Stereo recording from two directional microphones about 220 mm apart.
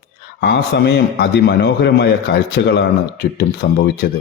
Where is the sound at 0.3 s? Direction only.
50° left (ahead or behind).